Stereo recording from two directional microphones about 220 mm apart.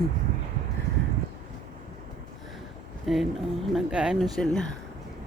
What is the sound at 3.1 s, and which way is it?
Speech, centre (ahead or behind).